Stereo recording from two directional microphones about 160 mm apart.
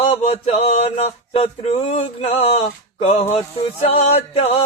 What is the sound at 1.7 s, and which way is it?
A man's voice, 45° left (ahead or behind).